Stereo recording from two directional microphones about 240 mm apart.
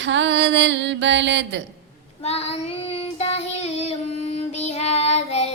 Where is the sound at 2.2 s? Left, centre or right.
Left.